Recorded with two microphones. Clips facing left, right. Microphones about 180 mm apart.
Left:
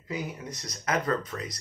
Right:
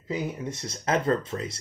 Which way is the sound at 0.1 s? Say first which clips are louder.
Right 4 dB; 25° right (ahead or behind).